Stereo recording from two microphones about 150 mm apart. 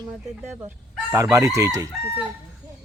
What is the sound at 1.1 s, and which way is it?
Speech, 20° right (ahead or behind).